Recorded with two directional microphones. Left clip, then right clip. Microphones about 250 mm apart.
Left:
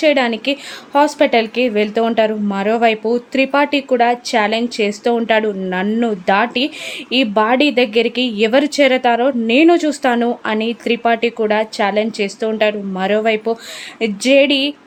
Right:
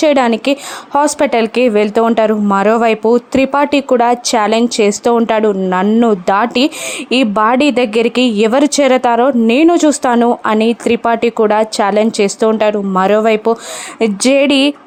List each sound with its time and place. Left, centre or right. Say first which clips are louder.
0.0 s speech: right 3 dB; right